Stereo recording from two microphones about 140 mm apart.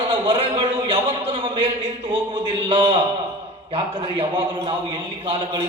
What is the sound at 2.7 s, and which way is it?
Speech, 35° right (ahead or behind).